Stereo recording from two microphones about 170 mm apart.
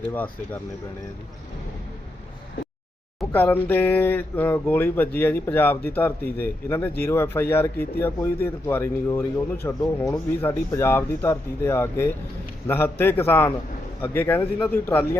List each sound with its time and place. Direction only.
0.0 s speech: 10° left (ahead or behind)
3.3 s speech: 10° left (ahead or behind)